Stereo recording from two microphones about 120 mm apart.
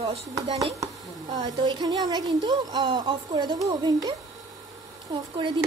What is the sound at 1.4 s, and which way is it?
Speech, 35° right (ahead or behind).